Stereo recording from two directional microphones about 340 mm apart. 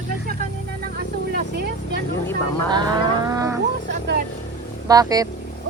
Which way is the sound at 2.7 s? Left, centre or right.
Centre.